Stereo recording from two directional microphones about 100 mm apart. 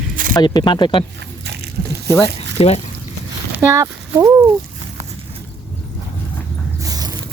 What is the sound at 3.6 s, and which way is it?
Speech, 30° right (ahead or behind).